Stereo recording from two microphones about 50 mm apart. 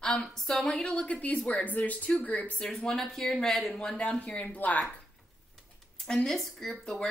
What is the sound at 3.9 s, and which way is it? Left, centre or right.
Speech, left.